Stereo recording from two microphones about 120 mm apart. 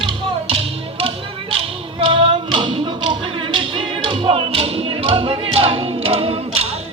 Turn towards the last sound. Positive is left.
turn(degrees=-50)  # may be behind; listen again after turning